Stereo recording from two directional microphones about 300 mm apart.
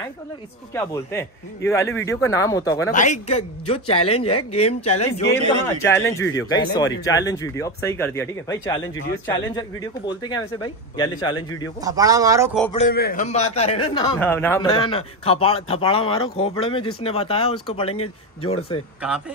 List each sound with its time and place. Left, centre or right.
0.7 s speech: centre
2.9 s speech: left
5.9 s speech: centre
11.8 s speech: centre
12.7 s speech: left
14.2 s speech: centre
19.0 s a man's voice: centre